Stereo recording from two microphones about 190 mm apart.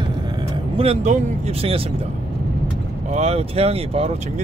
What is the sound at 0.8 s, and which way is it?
Speech, 35° right (ahead or behind).